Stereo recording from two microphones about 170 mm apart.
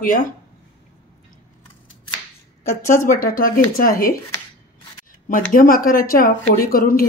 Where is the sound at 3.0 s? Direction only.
55° left (ahead or behind).